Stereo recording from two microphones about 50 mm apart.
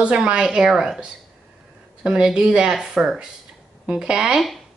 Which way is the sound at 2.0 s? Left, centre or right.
Centre.